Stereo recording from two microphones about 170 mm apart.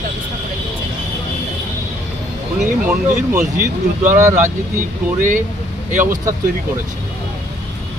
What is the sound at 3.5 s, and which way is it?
Speech, 50° right (ahead or behind).